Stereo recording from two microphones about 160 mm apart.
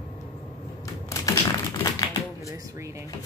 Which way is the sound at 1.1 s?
20° left (ahead or behind).